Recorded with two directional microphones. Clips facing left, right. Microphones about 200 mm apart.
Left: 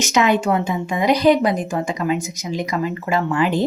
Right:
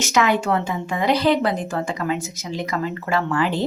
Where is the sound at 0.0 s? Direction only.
20° left (ahead or behind).